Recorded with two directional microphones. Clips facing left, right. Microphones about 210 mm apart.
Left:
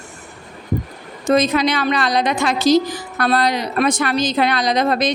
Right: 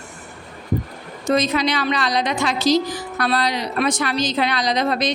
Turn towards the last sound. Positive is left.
turn(degrees=50)  # may be behind; listen again after turning